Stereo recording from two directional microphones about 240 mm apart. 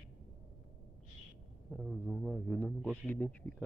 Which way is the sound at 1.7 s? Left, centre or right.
Centre.